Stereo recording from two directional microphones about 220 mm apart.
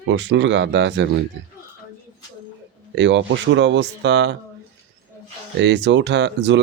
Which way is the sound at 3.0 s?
55° right (ahead or behind).